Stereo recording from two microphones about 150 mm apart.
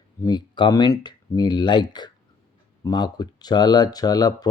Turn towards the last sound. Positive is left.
turn(degrees=25)  # may be behind; listen again after turning